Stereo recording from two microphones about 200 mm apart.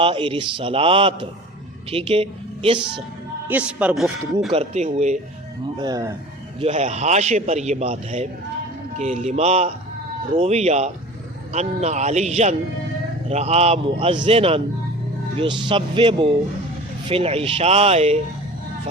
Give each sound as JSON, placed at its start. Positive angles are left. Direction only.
{"t": 0.0, "sound": "a man's voice", "side_deg": -25}
{"t": 3.5, "sound": "speech", "side_deg": -5}
{"t": 4.5, "sound": "a man's voice", "side_deg": -30}
{"t": 5.8, "sound": "speech", "side_deg": -15}
{"t": 6.6, "sound": "a man's voice", "side_deg": -35}